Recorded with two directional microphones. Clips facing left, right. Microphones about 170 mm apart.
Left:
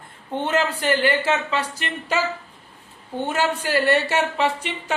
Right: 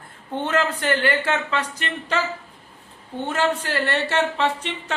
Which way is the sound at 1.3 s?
25° left (ahead or behind).